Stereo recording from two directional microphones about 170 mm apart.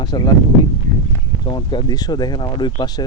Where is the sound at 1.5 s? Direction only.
25° left (ahead or behind).